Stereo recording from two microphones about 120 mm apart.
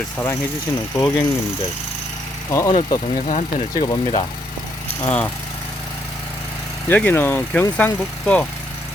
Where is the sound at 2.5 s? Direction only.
25° left (ahead or behind).